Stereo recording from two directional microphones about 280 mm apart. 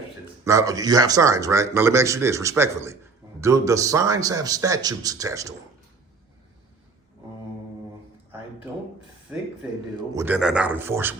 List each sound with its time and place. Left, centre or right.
0.4 s speech: centre
9.3 s speech: centre